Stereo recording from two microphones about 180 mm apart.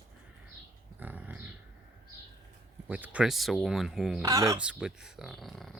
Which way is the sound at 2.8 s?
5° right (ahead or behind).